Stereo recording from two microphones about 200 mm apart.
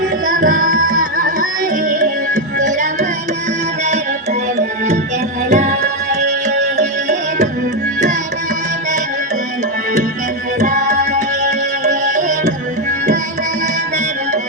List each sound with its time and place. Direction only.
0.3 s music: 40° right (ahead or behind)
5.5 s music: 35° right (ahead or behind)
10.6 s tabla: 40° right (ahead or behind)
11.9 s music: 40° right (ahead or behind)